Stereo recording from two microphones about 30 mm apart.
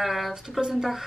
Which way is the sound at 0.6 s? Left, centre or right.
Right.